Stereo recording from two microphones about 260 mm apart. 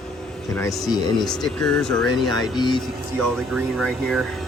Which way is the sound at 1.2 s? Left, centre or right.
Centre.